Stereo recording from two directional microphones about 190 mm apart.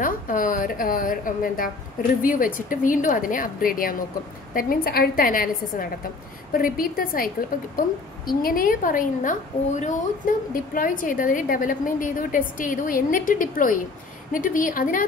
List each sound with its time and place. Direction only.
0.0 s a woman's voice: 45° left (ahead or behind)
8.3 s a woman's voice: 50° left (ahead or behind)